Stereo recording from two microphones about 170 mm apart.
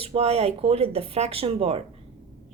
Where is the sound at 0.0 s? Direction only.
35° right (ahead or behind).